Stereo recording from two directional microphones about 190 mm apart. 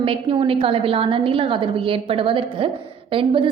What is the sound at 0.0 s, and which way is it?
A woman's voice, 30° right (ahead or behind).